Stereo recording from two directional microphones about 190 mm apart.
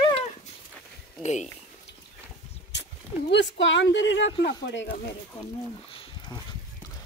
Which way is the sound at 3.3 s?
70° left (ahead or behind).